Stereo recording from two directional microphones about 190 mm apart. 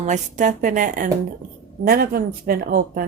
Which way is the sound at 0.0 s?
40° right (ahead or behind).